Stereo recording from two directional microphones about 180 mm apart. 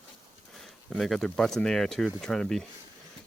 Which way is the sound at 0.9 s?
Centre (ahead or behind).